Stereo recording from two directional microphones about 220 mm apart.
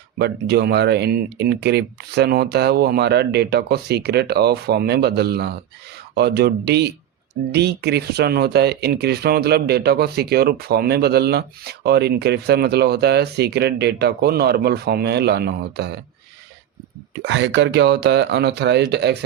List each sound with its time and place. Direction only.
0.2 s speech: 50° right (ahead or behind)
17.2 s speech: 55° right (ahead or behind)